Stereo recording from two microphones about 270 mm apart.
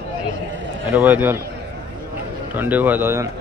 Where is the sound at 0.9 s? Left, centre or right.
Centre.